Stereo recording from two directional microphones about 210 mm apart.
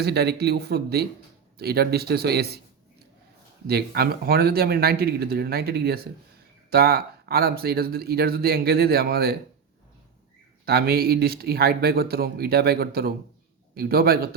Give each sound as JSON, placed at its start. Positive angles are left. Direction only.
{"t": 0.0, "sound": "speech", "side_deg": -50}
{"t": 3.7, "sound": "speech", "side_deg": -50}
{"t": 10.7, "sound": "speech", "side_deg": -45}